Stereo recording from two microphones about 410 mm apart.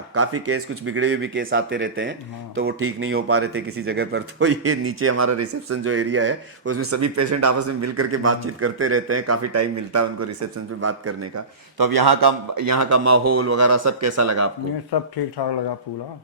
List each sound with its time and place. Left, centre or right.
0.1 s speech: right
11.8 s a man's voice: right
12.6 s speech: right
14.9 s speech: left